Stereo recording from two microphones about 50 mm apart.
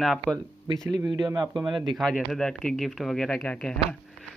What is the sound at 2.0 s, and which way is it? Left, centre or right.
Speech, centre.